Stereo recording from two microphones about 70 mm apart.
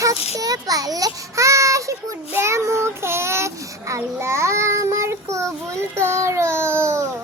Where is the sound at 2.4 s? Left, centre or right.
Right.